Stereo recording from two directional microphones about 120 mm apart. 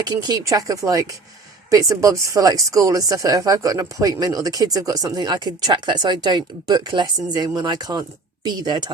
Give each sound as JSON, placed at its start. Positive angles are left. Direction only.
{"t": 0.0, "sound": "speech", "side_deg": -35}